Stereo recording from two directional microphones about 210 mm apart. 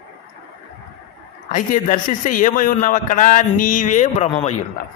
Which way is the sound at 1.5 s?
35° left (ahead or behind).